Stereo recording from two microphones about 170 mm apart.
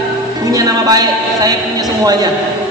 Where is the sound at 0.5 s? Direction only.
20° right (ahead or behind).